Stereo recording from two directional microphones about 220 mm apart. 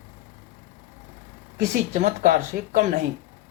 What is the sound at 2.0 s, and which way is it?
Speech, 40° right (ahead or behind).